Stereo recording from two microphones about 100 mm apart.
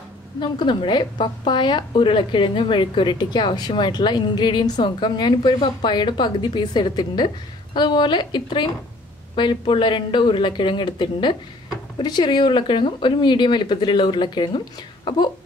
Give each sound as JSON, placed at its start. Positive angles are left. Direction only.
{"t": 0.4, "sound": "a woman's voice", "side_deg": 50}